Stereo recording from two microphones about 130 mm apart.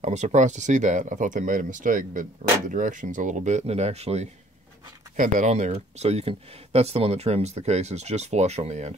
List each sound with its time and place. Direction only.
0.0 s speech: 60° right (ahead or behind)
5.1 s speech: 70° right (ahead or behind)